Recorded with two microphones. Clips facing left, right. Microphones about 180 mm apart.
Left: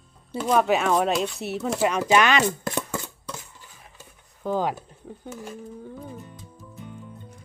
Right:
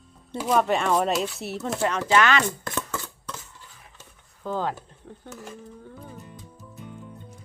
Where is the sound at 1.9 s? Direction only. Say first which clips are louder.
Even; 15° left (ahead or behind).